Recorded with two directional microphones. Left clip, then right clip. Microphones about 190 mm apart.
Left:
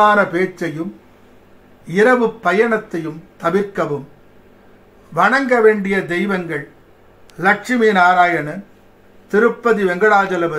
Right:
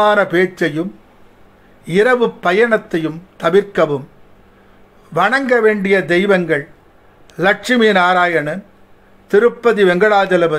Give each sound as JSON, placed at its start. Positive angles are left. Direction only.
{"t": 0.0, "sound": "speech", "side_deg": -55}
{"t": 1.9, "sound": "speech", "side_deg": -50}
{"t": 5.1, "sound": "speech", "side_deg": -50}
{"t": 7.6, "sound": "speech", "side_deg": -55}